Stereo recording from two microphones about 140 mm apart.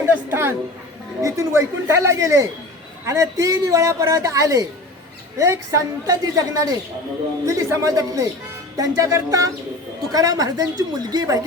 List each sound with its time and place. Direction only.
0.0 s a woman's voice: 15° right (ahead or behind)